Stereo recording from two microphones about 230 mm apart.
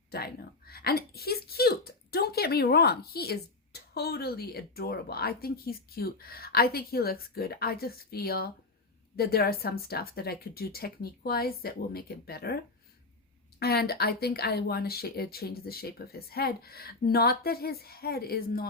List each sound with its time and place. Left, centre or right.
0.1 s a woman's voice: left
13.6 s a woman's voice: left